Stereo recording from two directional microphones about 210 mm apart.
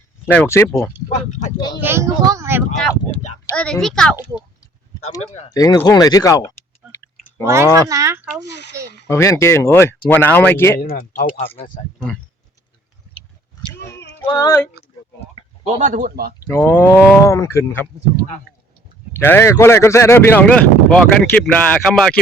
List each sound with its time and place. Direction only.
0.3 s a man's voice: 10° left (ahead or behind)
1.3 s speech: 35° left (ahead or behind)
1.5 s female singing: 20° left (ahead or behind)
1.8 s speech: 10° right (ahead or behind)
3.4 s a child's voice: 5° left (ahead or behind)
5.5 s a man's voice: 15° left (ahead or behind)
7.4 s speech: 10° right (ahead or behind)
8.4 s speech: 55° left (ahead or behind)
9.0 s a man's voice: 15° left (ahead or behind)
10.8 s speech: 45° left (ahead or behind)
14.3 s female singing: 20° left (ahead or behind)
15.6 s speech: 35° right (ahead or behind)
16.5 s a man's voice: 10° left (ahead or behind)
19.1 s a man's voice: 10° left (ahead or behind)